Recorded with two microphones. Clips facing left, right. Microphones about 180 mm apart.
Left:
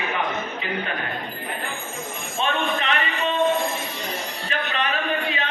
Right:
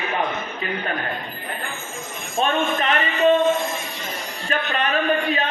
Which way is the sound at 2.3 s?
45° right (ahead or behind).